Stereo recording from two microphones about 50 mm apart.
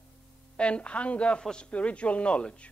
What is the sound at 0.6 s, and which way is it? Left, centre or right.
A man's voice, left.